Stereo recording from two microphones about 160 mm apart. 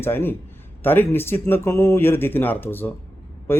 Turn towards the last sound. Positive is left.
turn(degrees=15)  # may be behind; listen again after turning